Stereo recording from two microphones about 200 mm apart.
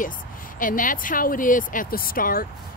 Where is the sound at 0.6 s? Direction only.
40° left (ahead or behind).